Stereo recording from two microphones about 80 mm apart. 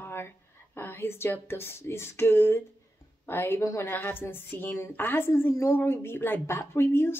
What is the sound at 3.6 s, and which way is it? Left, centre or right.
Speech, left.